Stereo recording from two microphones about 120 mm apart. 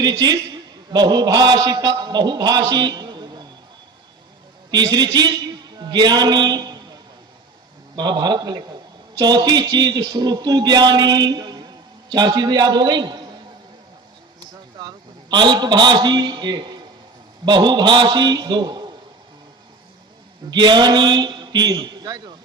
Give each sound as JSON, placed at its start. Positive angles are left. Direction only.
{"t": 0.0, "sound": "a man's voice", "side_deg": -35}
{"t": 4.7, "sound": "a man's voice", "side_deg": -35}
{"t": 14.8, "sound": "a man's voice", "side_deg": -35}
{"t": 20.5, "sound": "a man's voice", "side_deg": -35}